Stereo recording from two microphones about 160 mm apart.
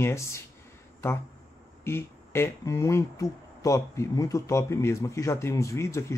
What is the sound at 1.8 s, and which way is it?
Speech, 15° left (ahead or behind).